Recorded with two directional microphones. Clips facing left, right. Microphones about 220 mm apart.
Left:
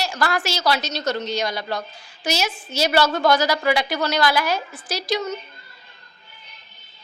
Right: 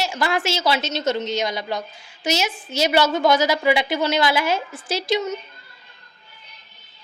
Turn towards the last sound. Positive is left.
turn(degrees=-20)  # may be behind; listen again after turning